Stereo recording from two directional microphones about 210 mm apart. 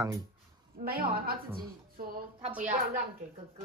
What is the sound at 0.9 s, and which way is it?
Speech, 45° right (ahead or behind).